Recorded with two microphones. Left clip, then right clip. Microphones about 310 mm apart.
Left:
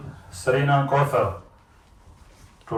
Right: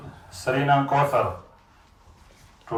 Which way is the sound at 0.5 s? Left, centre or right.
Right.